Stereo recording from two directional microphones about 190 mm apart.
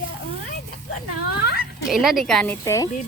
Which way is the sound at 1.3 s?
55° left (ahead or behind).